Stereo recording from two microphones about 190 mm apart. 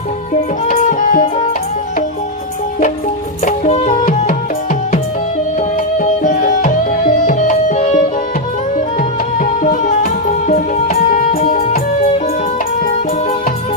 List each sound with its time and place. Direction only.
0.6 s music: 45° left (ahead or behind)
3.4 s music: 35° left (ahead or behind)
5.5 s tabla: 45° left (ahead or behind)
7.3 s music: 40° left (ahead or behind)
9.0 s music: 45° left (ahead or behind)